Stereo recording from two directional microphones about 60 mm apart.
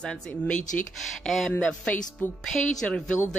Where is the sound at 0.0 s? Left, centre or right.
Centre.